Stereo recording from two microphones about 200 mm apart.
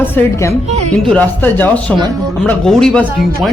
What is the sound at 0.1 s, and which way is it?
Speech, 15° left (ahead or behind).